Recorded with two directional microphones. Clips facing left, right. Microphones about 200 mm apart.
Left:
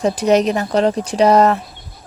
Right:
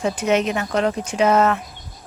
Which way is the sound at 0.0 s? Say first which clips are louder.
Left 5 dB; 35° left (ahead or behind).